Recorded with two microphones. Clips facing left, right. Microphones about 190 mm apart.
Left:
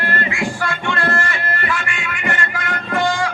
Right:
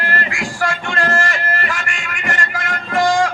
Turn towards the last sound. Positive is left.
turn(degrees=-45)  # may be behind; listen again after turning